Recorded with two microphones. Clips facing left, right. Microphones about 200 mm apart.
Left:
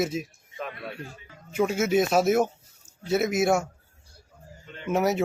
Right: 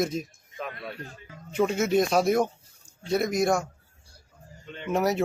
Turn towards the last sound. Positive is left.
turn(degrees=0)  # may be behind; listen again after turning